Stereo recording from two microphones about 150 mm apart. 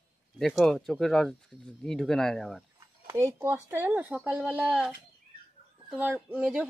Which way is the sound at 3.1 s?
20° right (ahead or behind).